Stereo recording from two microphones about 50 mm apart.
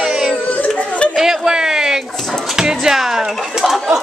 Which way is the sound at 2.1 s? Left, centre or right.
Centre.